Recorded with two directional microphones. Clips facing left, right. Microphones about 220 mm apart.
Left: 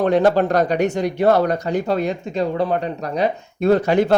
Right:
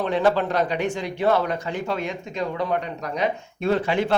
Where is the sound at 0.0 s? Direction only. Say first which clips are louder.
Left 5 dB; 40° left (ahead or behind).